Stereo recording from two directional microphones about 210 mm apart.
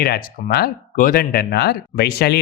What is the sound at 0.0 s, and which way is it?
Speech, 50° left (ahead or behind).